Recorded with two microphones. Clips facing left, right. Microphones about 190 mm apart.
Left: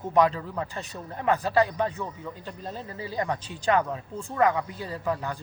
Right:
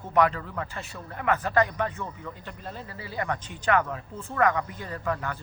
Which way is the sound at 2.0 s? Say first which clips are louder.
Left 2 dB; 15° left (ahead or behind).